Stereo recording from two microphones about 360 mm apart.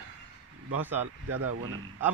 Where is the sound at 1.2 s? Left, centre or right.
Right.